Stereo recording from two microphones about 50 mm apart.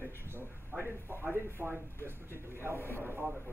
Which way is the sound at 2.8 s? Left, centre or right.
Left.